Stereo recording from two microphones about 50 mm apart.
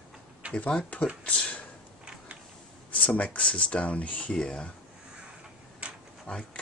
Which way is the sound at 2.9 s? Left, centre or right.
Left.